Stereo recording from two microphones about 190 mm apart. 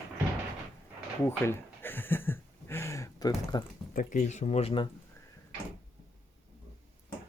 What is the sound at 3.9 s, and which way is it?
Speech, 40° left (ahead or behind).